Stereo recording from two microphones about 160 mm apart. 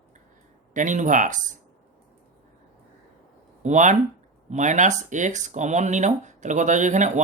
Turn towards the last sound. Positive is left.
turn(degrees=-50)  # may be behind; listen again after turning